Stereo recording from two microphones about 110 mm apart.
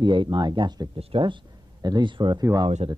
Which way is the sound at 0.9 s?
50° right (ahead or behind).